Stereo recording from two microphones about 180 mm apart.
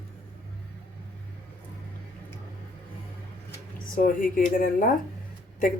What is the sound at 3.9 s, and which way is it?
Speech, 50° left (ahead or behind).